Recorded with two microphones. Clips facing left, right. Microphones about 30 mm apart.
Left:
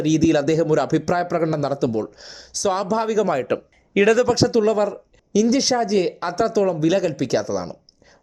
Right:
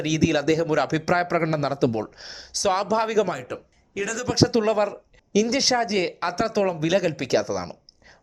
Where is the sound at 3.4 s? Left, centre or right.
Left.